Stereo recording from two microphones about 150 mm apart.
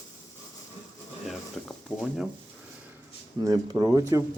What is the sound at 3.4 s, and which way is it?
Speech, 30° right (ahead or behind).